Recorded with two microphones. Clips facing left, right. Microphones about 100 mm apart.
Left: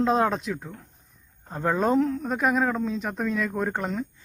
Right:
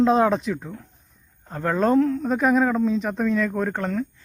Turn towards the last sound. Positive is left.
turn(degrees=15)  # may be behind; listen again after turning